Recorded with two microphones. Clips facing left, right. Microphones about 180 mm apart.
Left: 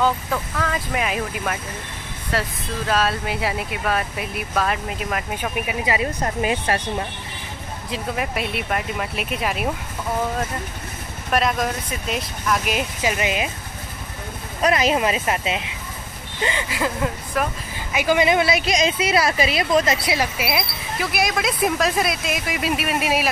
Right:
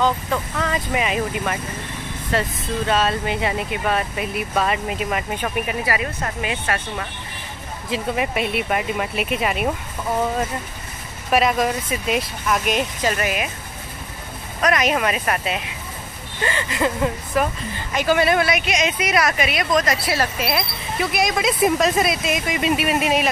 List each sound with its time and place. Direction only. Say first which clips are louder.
0.0 s speech: right 1 dB; centre (ahead or behind)
5.9 s speech: left 2 dB; 25° left (ahead or behind)
6.4 s speech: left 3 dB; 35° left (ahead or behind)
7.9 s speech: right 3 dB; centre (ahead or behind)
11.3 s speech: right 3 dB; centre (ahead or behind)
14.6 s speech: left 1 dB; 30° left (ahead or behind)
16.4 s speech: right 2 dB; 10° left (ahead or behind)
17.7 s a woman's voice: even; 10° left (ahead or behind)